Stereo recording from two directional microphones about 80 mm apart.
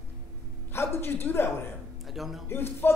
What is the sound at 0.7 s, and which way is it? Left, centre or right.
Speech, left.